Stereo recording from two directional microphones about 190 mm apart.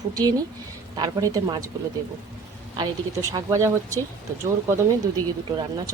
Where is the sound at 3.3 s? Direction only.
15° right (ahead or behind).